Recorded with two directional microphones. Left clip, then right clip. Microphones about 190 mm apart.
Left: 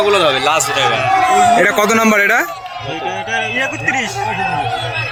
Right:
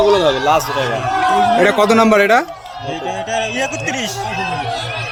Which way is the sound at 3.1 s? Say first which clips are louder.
Left 1 dB; 90° right.